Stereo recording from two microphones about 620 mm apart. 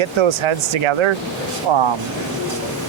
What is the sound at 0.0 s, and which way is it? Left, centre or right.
Speech, right.